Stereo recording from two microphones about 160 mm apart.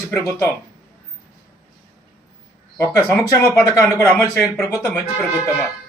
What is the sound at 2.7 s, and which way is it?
Speech, 15° left (ahead or behind).